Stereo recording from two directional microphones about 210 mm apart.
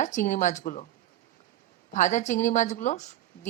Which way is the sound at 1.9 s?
35° left (ahead or behind).